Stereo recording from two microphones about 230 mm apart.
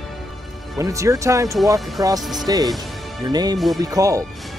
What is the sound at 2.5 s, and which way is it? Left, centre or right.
Speech, centre.